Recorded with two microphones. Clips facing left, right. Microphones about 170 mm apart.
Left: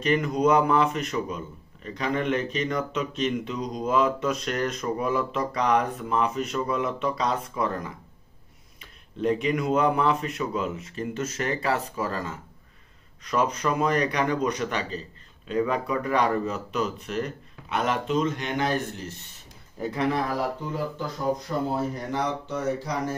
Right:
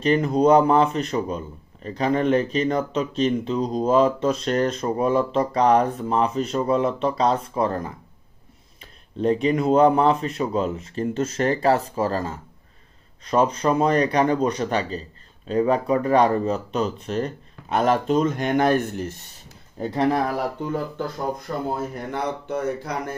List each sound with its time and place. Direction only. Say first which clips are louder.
0.0 s a man's voice: right 4 dB; 30° right (ahead or behind)
9.2 s a man's voice: right 4 dB; 35° right (ahead or behind); by 19.1 s 50° right (ahead or behind)
19.8 s a man's voice: right 5 dB; 35° right (ahead or behind)
21.9 s speech: right 1 dB; 55° right (ahead or behind)